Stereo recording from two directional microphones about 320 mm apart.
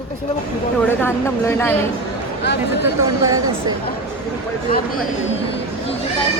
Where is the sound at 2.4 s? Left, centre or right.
Left.